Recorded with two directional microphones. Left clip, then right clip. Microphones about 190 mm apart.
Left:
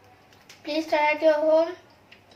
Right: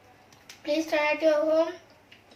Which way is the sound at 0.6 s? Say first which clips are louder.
Left 2 dB; 20° right (ahead or behind).